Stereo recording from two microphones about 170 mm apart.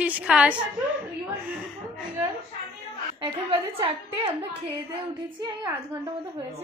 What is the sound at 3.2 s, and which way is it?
A woman's voice, 35° right (ahead or behind).